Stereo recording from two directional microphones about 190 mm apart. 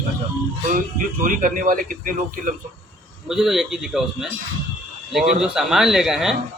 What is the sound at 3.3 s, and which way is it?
Speech, centre (ahead or behind).